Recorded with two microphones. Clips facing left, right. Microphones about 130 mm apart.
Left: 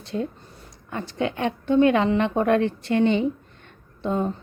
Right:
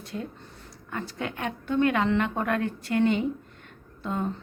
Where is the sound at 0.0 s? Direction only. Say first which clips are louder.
Left 7 dB; 30° left (ahead or behind).